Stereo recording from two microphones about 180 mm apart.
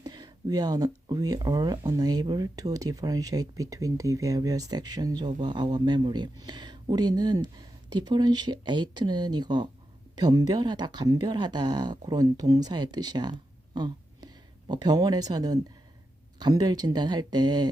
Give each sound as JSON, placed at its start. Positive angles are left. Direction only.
{"t": 0.0, "sound": "speech", "side_deg": -20}